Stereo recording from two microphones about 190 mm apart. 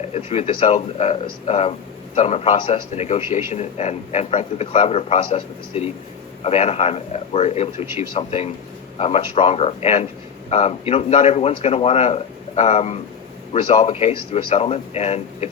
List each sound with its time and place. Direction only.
0.1 s speech: 30° left (ahead or behind)